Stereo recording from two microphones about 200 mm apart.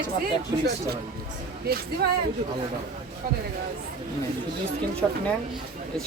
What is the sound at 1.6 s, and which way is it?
Speech, 50° right (ahead or behind).